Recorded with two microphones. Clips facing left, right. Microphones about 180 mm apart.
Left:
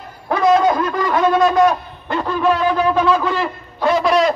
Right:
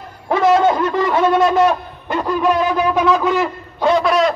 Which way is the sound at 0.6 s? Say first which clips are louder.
Right 1 dB; 25° right (ahead or behind).